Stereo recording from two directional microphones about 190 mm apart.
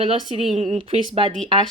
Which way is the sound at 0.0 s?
25° right (ahead or behind).